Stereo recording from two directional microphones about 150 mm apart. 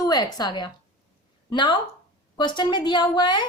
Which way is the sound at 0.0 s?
25° left (ahead or behind).